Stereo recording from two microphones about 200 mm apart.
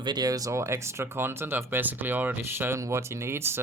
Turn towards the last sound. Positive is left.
turn(degrees=-10)  # may be behind; listen again after turning